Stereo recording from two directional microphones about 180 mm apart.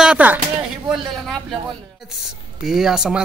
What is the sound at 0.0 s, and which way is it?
A man's voice, 5° right (ahead or behind).